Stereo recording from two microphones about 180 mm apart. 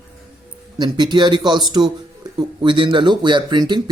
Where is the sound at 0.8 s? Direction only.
25° right (ahead or behind).